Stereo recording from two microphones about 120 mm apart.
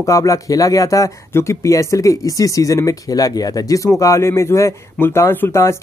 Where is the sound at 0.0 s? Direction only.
30° left (ahead or behind).